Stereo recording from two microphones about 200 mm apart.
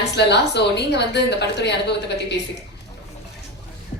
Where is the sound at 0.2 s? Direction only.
55° left (ahead or behind).